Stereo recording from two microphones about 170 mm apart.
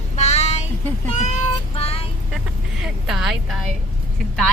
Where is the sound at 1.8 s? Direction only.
35° left (ahead or behind).